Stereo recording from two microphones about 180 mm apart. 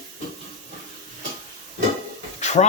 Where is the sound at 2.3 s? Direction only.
40° left (ahead or behind).